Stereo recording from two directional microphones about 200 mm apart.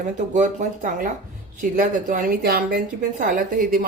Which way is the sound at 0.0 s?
35° right (ahead or behind).